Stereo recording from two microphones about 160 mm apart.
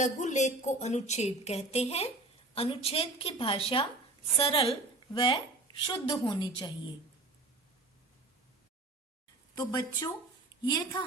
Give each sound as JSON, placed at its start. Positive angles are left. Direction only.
{"t": 0.0, "sound": "a woman's voice", "side_deg": 45}
{"t": 9.6, "sound": "a woman's voice", "side_deg": 25}